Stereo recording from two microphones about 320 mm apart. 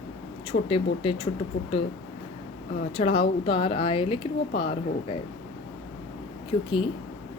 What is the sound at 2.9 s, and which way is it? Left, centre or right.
A woman's voice, centre.